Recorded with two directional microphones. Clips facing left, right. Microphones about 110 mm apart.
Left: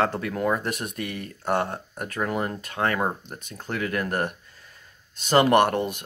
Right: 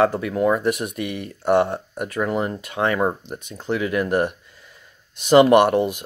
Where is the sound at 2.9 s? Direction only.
5° right (ahead or behind).